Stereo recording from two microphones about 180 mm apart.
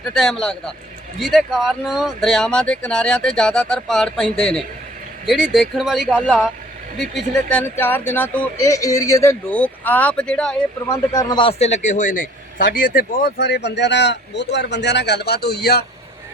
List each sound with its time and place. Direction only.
0.1 s speech: centre (ahead or behind)
7.5 s speech: 10° left (ahead or behind)
10.8 s a man's voice: 20° left (ahead or behind); by 15.9 s 60° left (ahead or behind)